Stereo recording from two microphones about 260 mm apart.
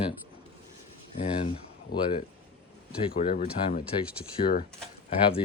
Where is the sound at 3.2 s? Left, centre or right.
Left.